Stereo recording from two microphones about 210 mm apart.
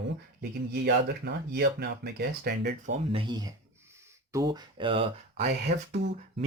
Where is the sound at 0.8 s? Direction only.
55° right (ahead or behind).